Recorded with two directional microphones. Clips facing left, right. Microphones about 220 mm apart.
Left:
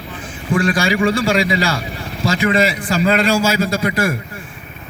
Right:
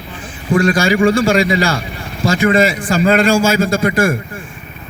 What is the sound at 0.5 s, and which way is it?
A man's voice, 45° right (ahead or behind).